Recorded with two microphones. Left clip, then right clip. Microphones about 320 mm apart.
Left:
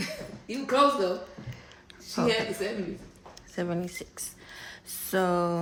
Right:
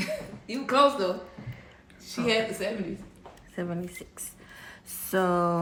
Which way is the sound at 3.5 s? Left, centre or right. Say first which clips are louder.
Left 3 dB; centre.